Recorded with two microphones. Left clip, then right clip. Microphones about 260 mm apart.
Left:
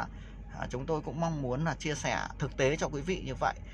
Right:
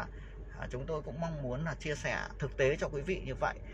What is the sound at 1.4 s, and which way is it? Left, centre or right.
Speech, left.